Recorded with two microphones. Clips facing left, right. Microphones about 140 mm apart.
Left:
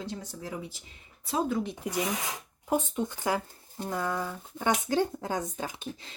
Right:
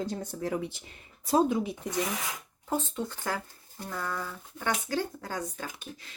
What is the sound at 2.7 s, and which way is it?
Speech, 15° left (ahead or behind).